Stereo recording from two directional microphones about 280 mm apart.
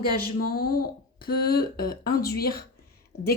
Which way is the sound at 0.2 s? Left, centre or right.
Left.